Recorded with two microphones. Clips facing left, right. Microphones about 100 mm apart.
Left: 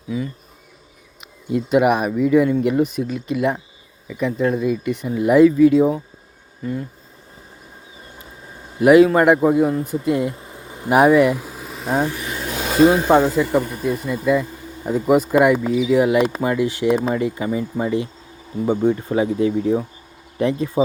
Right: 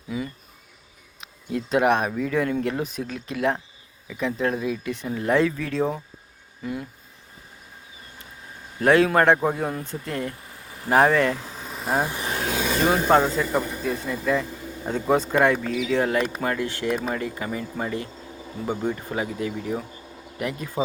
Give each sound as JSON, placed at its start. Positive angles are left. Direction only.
{"t": 0.1, "sound": "speech", "side_deg": -5}
{"t": 8.8, "sound": "speech", "side_deg": 5}
{"t": 12.9, "sound": "speech", "side_deg": 10}